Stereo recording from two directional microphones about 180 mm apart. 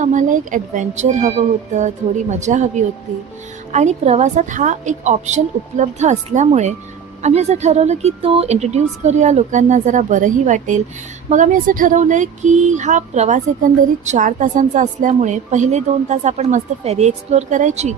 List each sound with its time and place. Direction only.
0.0 s speech: 45° right (ahead or behind)
2.4 s speech: 40° right (ahead or behind)